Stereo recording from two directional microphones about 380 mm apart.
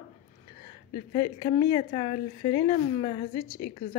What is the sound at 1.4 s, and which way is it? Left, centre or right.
Speech, centre.